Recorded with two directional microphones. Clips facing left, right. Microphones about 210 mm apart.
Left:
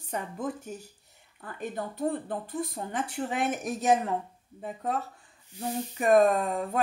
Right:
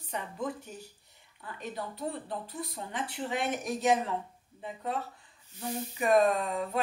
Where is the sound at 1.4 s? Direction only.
50° left (ahead or behind).